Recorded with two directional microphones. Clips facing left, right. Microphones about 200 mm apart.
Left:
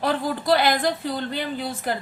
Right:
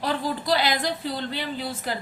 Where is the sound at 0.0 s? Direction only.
55° left (ahead or behind).